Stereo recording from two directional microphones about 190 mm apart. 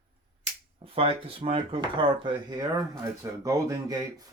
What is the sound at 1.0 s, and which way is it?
Speech, 30° right (ahead or behind).